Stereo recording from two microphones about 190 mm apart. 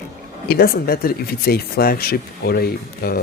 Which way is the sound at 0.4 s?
55° left (ahead or behind).